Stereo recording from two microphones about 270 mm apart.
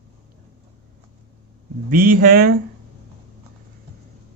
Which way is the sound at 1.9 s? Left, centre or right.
Right.